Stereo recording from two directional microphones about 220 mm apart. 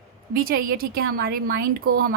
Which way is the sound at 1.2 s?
45° right (ahead or behind).